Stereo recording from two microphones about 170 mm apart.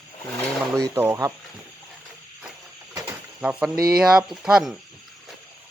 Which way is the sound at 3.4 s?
5° right (ahead or behind).